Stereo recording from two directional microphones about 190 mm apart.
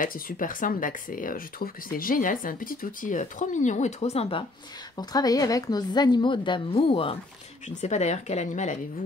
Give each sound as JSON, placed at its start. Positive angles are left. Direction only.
{"t": 0.0, "sound": "speech", "side_deg": 45}
{"t": 4.9, "sound": "a woman's voice", "side_deg": 20}